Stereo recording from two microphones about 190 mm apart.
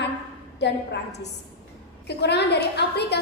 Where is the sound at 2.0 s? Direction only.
60° left (ahead or behind).